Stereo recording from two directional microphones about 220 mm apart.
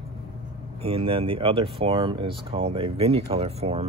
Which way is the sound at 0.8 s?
25° right (ahead or behind).